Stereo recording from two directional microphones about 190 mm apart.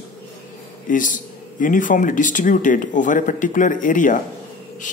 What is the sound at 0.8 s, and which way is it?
Speech, 45° left (ahead or behind).